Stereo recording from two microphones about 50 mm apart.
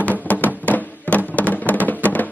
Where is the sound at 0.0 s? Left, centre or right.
Left.